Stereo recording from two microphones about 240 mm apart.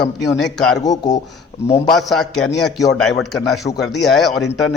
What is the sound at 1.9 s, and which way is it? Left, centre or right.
Speech, centre.